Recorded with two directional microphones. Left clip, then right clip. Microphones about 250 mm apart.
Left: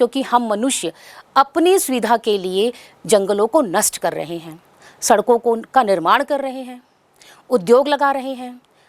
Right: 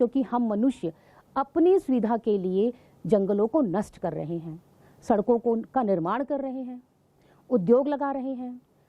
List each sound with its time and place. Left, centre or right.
0.0 s a woman's voice: centre
5.2 s a woman's voice: left
5.5 s a woman's voice: centre